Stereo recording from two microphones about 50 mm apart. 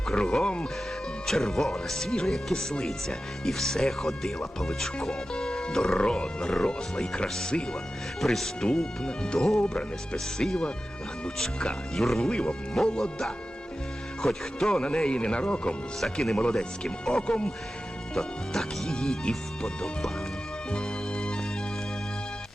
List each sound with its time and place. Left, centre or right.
0.2 s speech: centre
1.3 s speech: centre
8.2 s speech: centre
8.6 s speech: centre
10.3 s speech: centre
12.2 s speech: left
14.3 s speech: centre
14.8 s speech: centre
18.1 s speech: centre
20.7 s music: centre